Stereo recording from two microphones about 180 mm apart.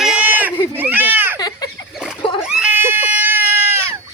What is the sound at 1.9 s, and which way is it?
Splash, 5° right (ahead or behind).